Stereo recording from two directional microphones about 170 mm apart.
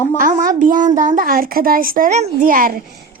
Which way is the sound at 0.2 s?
50° right (ahead or behind).